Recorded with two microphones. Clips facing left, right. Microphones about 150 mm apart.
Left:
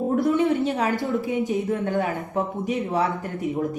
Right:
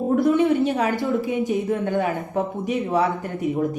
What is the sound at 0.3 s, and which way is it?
A woman's voice, 20° right (ahead or behind).